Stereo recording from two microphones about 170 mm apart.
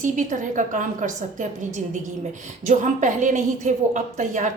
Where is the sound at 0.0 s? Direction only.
45° right (ahead or behind).